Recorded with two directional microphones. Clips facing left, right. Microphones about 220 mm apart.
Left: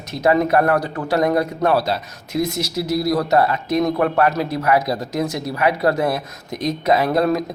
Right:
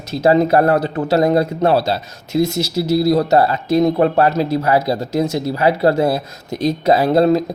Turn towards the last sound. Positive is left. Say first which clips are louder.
# right 4 dB
turn(degrees=-25)  # may be behind; listen again after turning